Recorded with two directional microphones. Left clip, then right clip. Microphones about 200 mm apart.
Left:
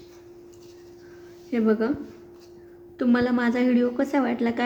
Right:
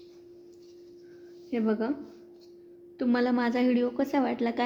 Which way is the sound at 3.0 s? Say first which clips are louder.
Left 4 dB; 15° right (ahead or behind).